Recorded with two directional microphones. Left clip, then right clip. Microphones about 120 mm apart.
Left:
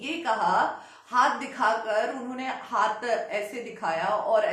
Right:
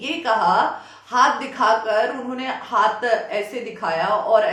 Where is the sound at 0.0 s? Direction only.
20° right (ahead or behind).